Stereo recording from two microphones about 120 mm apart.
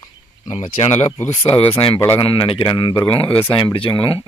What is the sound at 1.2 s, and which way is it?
Speech, 20° left (ahead or behind).